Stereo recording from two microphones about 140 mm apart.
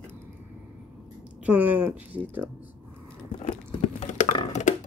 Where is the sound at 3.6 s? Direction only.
60° left (ahead or behind).